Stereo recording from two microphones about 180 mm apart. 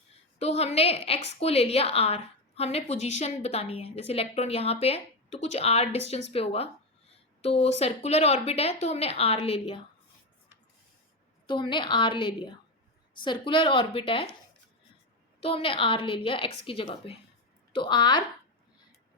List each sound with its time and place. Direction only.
0.3 s a woman's voice: 35° left (ahead or behind)
11.4 s a woman's voice: 25° left (ahead or behind)
15.4 s a woman's voice: 30° left (ahead or behind)